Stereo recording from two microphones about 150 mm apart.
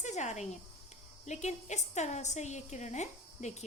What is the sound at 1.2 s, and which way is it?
A woman's voice, 50° left (ahead or behind).